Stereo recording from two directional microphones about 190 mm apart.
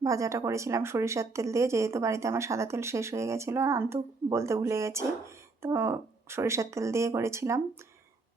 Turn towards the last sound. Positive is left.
turn(degrees=-15)  # may be behind; listen again after turning